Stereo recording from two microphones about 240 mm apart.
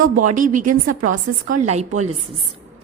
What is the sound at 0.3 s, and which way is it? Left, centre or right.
Speech, right.